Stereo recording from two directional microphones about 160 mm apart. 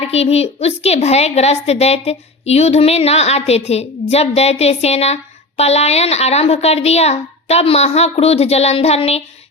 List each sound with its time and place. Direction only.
0.0 s a woman's voice: 40° left (ahead or behind)